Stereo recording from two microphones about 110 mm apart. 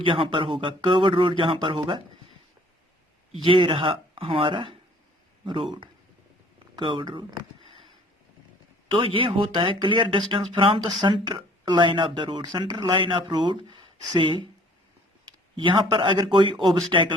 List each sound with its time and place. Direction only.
0.0 s speech: 50° right (ahead or behind)
3.4 s speech: 50° right (ahead or behind)
6.7 s a sound: 45° right (ahead or behind)
8.9 s speech: 50° right (ahead or behind)